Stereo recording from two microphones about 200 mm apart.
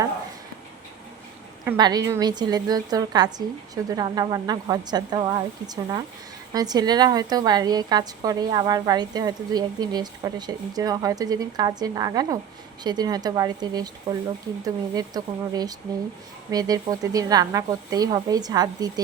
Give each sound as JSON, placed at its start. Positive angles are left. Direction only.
{"t": 1.6, "sound": "a woman's voice", "side_deg": -15}